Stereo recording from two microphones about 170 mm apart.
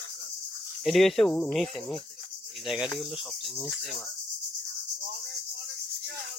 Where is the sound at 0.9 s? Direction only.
Centre (ahead or behind).